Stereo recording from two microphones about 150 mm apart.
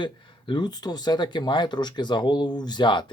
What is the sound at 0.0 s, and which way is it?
Speech, 30° left (ahead or behind).